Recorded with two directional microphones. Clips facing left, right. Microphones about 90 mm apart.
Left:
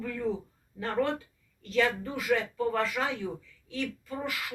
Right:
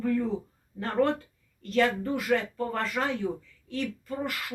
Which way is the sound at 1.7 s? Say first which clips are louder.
Right 3 dB; 50° right (ahead or behind).